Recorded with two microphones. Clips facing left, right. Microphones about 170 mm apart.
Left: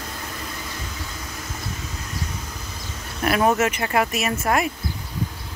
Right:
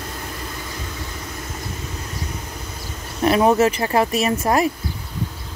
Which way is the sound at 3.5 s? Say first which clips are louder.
Right 4 dB; 35° right (ahead or behind).